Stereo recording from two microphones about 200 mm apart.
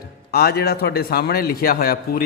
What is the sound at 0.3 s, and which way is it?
Speech, 50° left (ahead or behind).